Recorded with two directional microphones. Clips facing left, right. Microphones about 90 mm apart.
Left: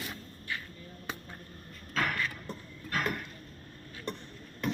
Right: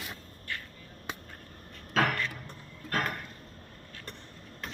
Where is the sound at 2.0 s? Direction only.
90° right.